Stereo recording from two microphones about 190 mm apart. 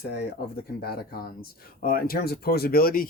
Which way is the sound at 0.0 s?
60° left (ahead or behind).